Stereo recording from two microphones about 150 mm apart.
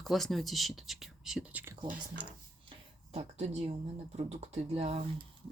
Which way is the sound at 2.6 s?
45° right (ahead or behind).